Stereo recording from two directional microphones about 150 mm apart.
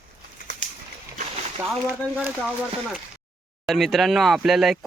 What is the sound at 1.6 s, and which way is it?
Speech, 15° right (ahead or behind).